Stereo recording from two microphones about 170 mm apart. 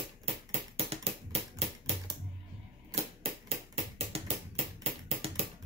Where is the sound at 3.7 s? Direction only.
35° right (ahead or behind).